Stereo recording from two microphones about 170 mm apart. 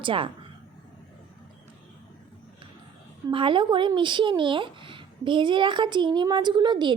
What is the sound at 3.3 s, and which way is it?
Speech, 30° right (ahead or behind).